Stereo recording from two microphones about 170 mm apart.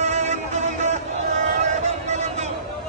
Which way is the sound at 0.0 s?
40° right (ahead or behind).